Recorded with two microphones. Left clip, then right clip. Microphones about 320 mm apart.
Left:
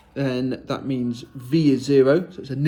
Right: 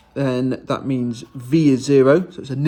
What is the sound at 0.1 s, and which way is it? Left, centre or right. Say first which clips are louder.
Speech: right 4 dB; centre.